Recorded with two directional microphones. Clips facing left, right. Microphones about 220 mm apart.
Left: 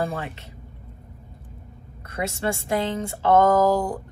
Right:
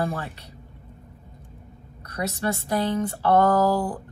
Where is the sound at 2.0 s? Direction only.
25° left (ahead or behind).